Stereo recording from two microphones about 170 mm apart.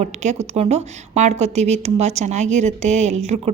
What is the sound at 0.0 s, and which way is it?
A woman's voice, 45° right (ahead or behind).